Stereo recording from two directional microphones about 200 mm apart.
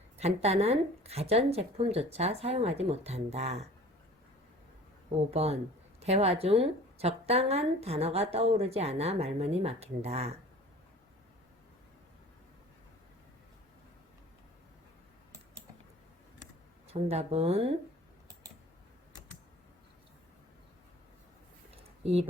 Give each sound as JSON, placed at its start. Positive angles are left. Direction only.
{"t": 0.2, "sound": "a woman's voice", "side_deg": -30}
{"t": 5.3, "sound": "a woman's voice", "side_deg": -30}
{"t": 16.9, "sound": "speech", "side_deg": -30}
{"t": 21.8, "sound": "a sound", "side_deg": -30}